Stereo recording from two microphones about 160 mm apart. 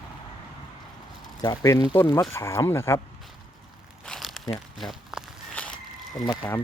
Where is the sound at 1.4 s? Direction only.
20° left (ahead or behind).